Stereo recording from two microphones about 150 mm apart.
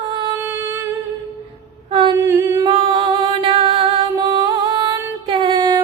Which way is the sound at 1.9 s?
30° right (ahead or behind).